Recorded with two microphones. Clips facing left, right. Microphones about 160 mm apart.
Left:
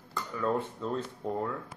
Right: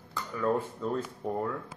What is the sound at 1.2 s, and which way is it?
Speech, 15° right (ahead or behind).